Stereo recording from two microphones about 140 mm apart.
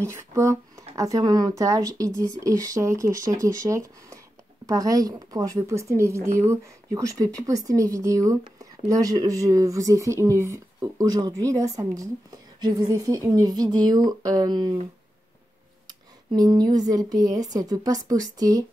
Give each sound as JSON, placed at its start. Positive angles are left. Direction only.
{"t": 0.0, "sound": "speech", "side_deg": -20}
{"t": 16.3, "sound": "speech", "side_deg": -30}